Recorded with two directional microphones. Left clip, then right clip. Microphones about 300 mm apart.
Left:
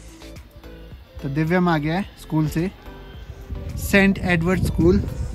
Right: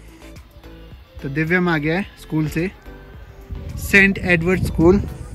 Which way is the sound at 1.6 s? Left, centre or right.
Centre.